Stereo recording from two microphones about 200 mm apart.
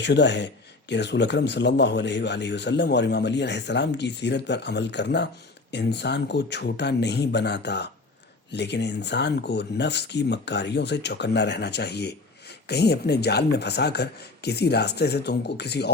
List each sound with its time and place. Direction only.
0.0 s speech: 60° left (ahead or behind)